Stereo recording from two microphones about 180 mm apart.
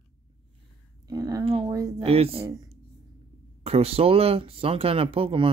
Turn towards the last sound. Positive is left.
turn(degrees=-30)  # may be behind; listen again after turning